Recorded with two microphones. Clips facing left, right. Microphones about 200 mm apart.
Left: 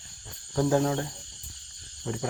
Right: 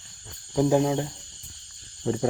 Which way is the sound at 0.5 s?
15° right (ahead or behind).